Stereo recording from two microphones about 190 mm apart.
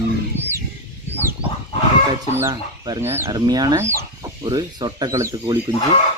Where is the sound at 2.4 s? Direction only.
15° right (ahead or behind).